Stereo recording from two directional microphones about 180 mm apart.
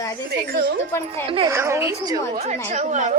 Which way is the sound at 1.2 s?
30° right (ahead or behind).